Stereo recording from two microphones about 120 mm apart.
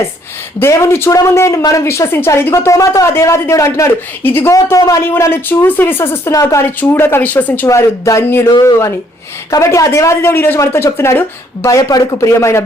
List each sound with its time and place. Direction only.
0.6 s speech: 20° left (ahead or behind)
4.5 s speech: 30° left (ahead or behind)
7.7 s speech: 25° left (ahead or behind)